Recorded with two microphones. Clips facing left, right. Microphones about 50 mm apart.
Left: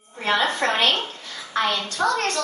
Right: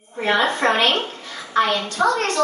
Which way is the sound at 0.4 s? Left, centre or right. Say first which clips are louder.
Right 4 dB; right.